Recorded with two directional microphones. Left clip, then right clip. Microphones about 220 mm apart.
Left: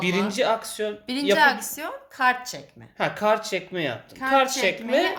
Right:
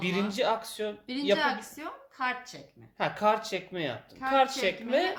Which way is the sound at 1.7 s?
50° left (ahead or behind).